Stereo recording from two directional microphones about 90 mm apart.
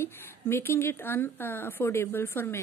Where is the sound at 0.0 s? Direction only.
25° left (ahead or behind).